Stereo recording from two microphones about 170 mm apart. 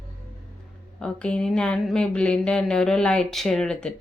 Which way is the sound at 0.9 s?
5° left (ahead or behind).